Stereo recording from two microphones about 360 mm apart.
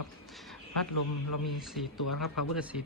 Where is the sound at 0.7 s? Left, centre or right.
Left.